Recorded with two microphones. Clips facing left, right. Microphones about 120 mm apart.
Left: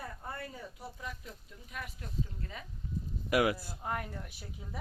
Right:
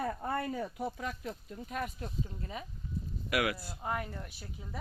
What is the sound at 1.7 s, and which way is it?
Speech, 35° right (ahead or behind).